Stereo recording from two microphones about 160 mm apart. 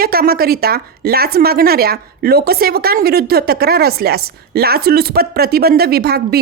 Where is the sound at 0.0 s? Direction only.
70° right (ahead or behind).